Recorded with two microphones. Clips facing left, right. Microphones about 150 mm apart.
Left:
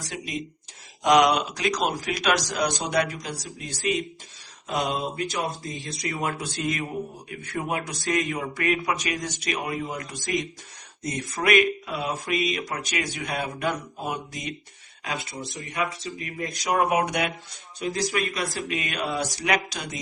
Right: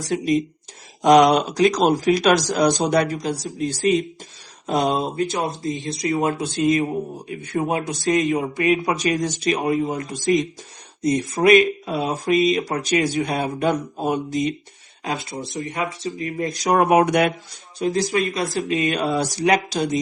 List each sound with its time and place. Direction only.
1.0 s speech: 40° right (ahead or behind)
4.6 s speech: 35° right (ahead or behind)
16.7 s speech: 55° right (ahead or behind)
17.7 s speech: 30° right (ahead or behind)